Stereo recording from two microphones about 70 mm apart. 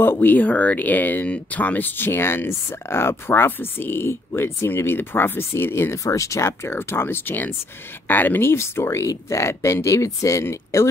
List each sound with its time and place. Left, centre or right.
0.0 s speech: left
6.0 s speech: left